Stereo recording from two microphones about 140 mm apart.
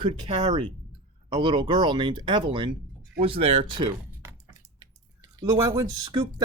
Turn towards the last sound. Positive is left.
turn(degrees=-20)  # may be behind; listen again after turning